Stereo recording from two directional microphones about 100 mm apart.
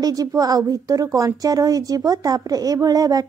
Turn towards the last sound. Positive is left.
turn(degrees=-40)  # may be behind; listen again after turning